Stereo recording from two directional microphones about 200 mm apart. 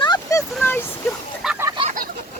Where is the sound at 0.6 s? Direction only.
10° left (ahead or behind).